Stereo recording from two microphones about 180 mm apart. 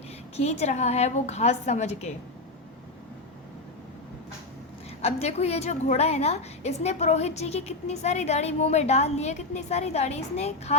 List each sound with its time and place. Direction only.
0.3 s a woman's voice: 35° left (ahead or behind)
5.0 s a woman's voice: 35° left (ahead or behind)